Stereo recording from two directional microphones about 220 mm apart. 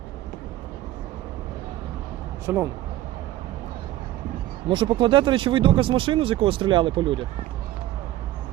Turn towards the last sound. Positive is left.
turn(degrees=-20)  # may be behind; listen again after turning